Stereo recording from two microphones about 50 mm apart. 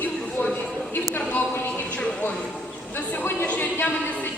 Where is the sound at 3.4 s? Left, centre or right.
Left.